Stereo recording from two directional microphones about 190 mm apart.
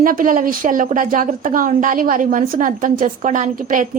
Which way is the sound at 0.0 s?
45° right (ahead or behind).